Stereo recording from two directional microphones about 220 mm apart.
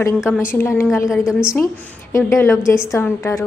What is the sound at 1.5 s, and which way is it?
A woman's voice, 15° left (ahead or behind).